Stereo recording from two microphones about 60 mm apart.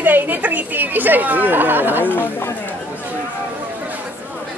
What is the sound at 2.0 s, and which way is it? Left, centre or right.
Speech, left.